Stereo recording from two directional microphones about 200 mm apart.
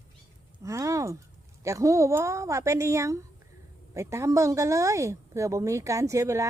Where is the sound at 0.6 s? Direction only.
15° right (ahead or behind).